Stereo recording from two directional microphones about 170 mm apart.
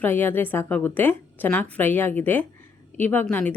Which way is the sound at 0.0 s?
10° left (ahead or behind).